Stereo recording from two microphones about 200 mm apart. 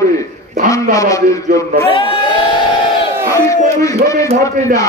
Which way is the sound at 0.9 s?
15° left (ahead or behind).